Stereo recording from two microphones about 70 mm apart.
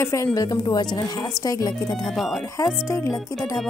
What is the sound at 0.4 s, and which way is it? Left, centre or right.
Speech, left.